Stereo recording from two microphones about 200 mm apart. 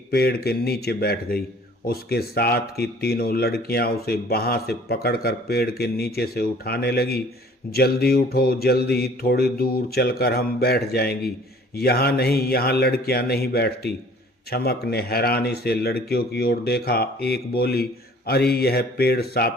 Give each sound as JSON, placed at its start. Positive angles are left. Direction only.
{"t": 0.1, "sound": "speech", "side_deg": 50}